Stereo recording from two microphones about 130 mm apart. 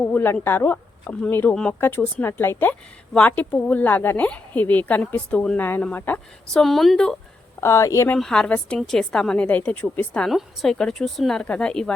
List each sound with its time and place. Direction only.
0.0 s speech: 15° left (ahead or behind)
6.6 s speech: centre (ahead or behind)
7.6 s speech: 20° left (ahead or behind)
8.1 s speech: 5° left (ahead or behind)